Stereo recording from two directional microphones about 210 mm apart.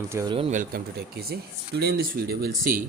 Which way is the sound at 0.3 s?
30° right (ahead or behind).